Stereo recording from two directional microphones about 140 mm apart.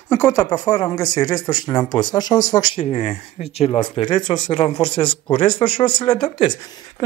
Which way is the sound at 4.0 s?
35° left (ahead or behind).